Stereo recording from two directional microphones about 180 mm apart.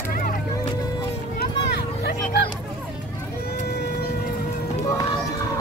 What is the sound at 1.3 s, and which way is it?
Vehicle, 65° left (ahead or behind).